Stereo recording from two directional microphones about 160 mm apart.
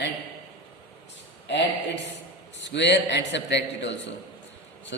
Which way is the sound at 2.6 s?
90° left.